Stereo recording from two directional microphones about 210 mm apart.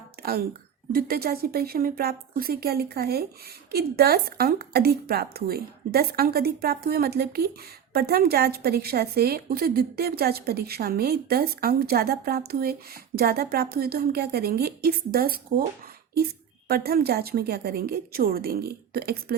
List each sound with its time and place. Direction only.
0.2 s a sound: 45° right (ahead or behind)
0.9 s a woman's voice: 45° right (ahead or behind)
16.6 s a woman's voice: 45° right (ahead or behind)